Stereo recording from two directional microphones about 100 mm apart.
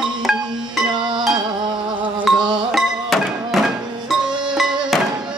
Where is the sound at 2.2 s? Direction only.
5° right (ahead or behind).